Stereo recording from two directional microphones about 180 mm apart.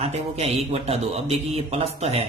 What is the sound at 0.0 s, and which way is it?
Speech, 35° right (ahead or behind).